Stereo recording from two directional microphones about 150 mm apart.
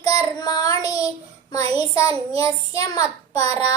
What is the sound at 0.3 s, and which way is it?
Child singing, 25° left (ahead or behind).